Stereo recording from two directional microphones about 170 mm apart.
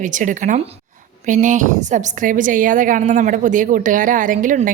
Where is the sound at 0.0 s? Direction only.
50° right (ahead or behind).